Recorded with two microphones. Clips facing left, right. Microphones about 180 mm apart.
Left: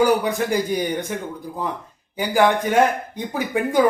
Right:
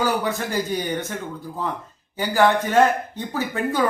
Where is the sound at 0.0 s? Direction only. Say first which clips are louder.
Left 5 dB; 15° left (ahead or behind).